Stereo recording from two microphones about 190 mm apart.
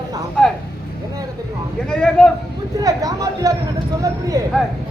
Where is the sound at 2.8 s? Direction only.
20° right (ahead or behind).